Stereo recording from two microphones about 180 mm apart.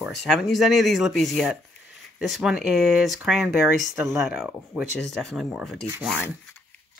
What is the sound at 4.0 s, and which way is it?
Speech, 15° right (ahead or behind).